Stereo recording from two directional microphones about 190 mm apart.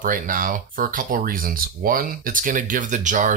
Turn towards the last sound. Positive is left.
turn(degrees=-40)  # may be behind; listen again after turning